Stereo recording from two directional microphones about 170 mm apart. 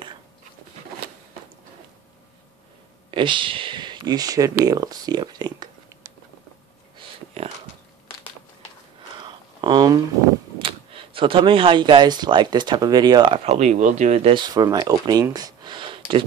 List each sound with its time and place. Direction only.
3.1 s speech: 30° right (ahead or behind)
9.2 s a sound: 25° right (ahead or behind)
10.6 s speech: 30° right (ahead or behind)
14.3 s speech: 25° right (ahead or behind)